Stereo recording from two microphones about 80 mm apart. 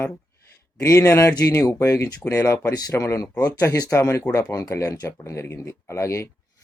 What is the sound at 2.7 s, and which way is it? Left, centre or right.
Speech, left.